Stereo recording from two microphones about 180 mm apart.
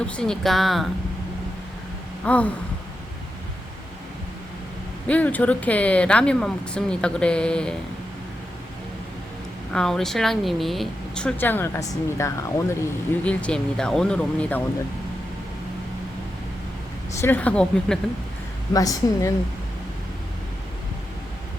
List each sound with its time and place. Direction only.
0.0 s speech: 5° left (ahead or behind)
2.2 s speech: 5° left (ahead or behind)
5.0 s speech: 10° left (ahead or behind)
9.7 s speech: centre (ahead or behind)
13.2 s speech: 5° left (ahead or behind)
17.2 s speech: 10° left (ahead or behind)
18.7 s a woman's voice: 20° left (ahead or behind)